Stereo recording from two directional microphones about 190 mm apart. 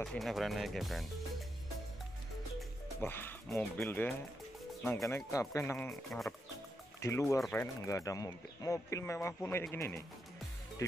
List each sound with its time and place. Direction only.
0.0 s speech: centre (ahead or behind)
3.0 s speech: 10° left (ahead or behind)
5.9 s speech: centre (ahead or behind)
7.0 s speech: 15° left (ahead or behind)